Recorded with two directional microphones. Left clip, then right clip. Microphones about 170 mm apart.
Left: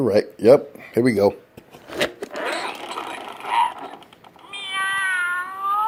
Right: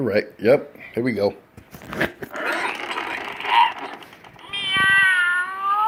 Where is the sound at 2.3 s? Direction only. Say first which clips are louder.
Right 2 dB; 15° left (ahead or behind).